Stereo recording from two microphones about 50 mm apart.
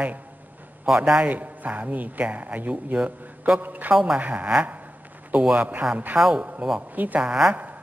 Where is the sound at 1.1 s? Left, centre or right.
Right.